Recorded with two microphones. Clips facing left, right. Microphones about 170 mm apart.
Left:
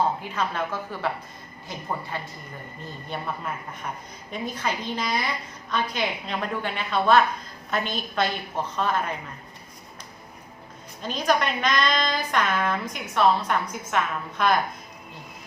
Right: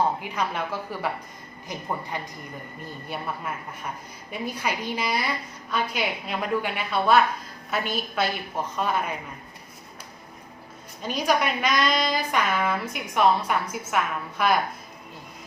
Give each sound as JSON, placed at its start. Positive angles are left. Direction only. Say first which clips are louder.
{"t": 0.2, "sound": "a woman's voice", "louder": "even", "side_deg": -10}
{"t": 11.0, "sound": "a woman's voice", "louder": "even", "side_deg": -10}